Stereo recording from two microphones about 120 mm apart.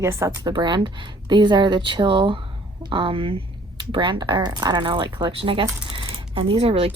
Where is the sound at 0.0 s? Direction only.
25° right (ahead or behind).